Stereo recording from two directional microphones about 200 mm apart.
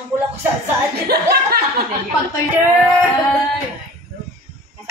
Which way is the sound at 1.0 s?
50° right (ahead or behind).